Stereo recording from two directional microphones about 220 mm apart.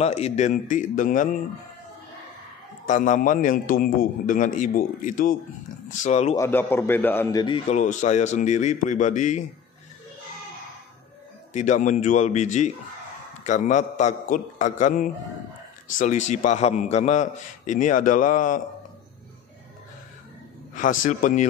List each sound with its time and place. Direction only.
0.0 s a man's voice: 30° left (ahead or behind)
2.9 s a man's voice: 35° left (ahead or behind)
6.3 s a man's voice: 10° left (ahead or behind)
7.7 s a man's voice: 35° left (ahead or behind)
11.5 s a man's voice: 35° left (ahead or behind)
21.0 s a man's voice: 35° left (ahead or behind)